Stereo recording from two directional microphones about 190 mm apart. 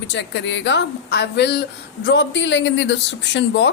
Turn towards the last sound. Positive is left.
turn(degrees=65)  # may be behind; listen again after turning